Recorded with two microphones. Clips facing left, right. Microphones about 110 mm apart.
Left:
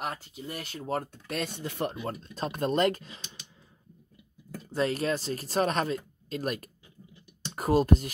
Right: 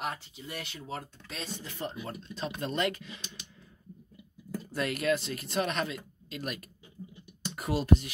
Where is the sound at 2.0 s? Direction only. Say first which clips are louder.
Left 3 dB; 45° left (ahead or behind).